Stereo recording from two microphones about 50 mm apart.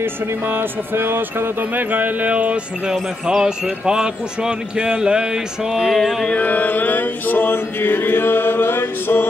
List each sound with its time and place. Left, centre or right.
0.0 s speech: right
2.9 s speech: centre
6.3 s mantra: left